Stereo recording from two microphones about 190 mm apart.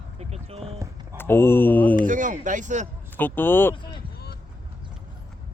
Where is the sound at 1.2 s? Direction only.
10° left (ahead or behind).